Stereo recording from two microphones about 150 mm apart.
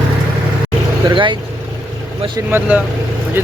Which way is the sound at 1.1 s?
35° right (ahead or behind).